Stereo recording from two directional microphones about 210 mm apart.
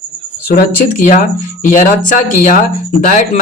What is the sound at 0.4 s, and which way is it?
Speech, 45° left (ahead or behind).